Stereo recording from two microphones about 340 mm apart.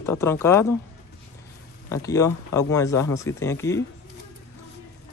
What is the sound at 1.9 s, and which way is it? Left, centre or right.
Speech, centre.